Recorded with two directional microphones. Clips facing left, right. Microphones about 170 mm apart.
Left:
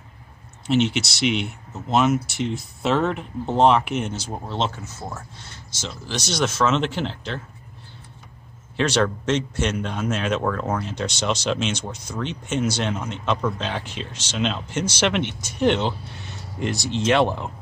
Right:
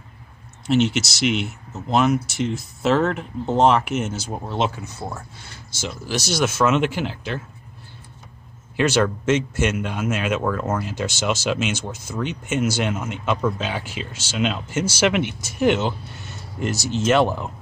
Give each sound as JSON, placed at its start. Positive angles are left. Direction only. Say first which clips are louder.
{"t": 0.7, "sound": "speech", "louder": "right 1 dB", "side_deg": 0}
{"t": 8.7, "sound": "speech", "louder": "right 2 dB", "side_deg": -5}